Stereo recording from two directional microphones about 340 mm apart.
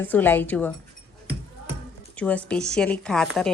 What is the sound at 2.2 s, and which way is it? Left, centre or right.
A woman's voice, centre.